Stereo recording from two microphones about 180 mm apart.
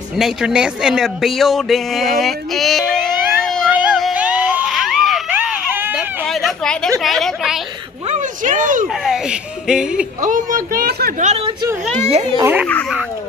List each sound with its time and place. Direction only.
0.2 s speech: 5° right (ahead or behind)
3.4 s a sound: 5° left (ahead or behind)
3.7 s a sound: 5° right (ahead or behind)
6.2 s a sound: centre (ahead or behind)
7.0 s speech: centre (ahead or behind)
8.1 s speech: 45° right (ahead or behind)
8.8 s speech: centre (ahead or behind)
10.2 s speech: 50° right (ahead or behind)
11.1 s a child's voice: 40° right (ahead or behind)
12.4 s speech: 15° right (ahead or behind)